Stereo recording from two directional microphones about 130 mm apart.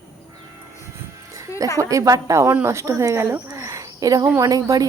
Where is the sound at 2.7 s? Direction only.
20° right (ahead or behind).